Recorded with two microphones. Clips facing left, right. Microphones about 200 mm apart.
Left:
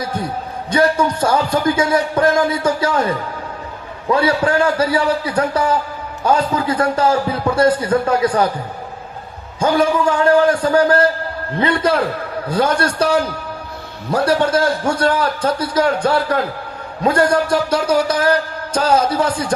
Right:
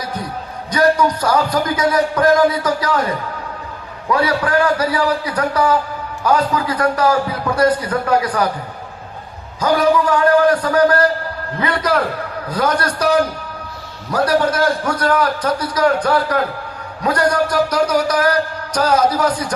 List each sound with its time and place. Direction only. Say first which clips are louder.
0.7 s a man's voice: right 1 dB; 25° left (ahead or behind)
4.1 s a man's voice: left 1 dB; 25° left (ahead or behind)
9.6 s a man's voice: even; 25° left (ahead or behind)